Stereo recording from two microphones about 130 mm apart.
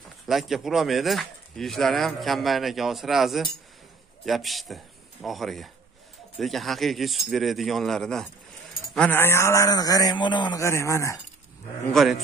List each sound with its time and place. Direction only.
0.3 s a man's voice: centre (ahead or behind); by 10.6 s 35° left (ahead or behind)
10.6 s a man's voice: 20° left (ahead or behind)
11.9 s speech: centre (ahead or behind)